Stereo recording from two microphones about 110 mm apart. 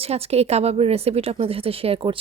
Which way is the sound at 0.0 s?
70° right (ahead or behind).